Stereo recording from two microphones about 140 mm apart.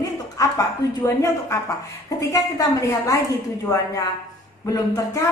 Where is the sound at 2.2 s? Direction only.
25° left (ahead or behind).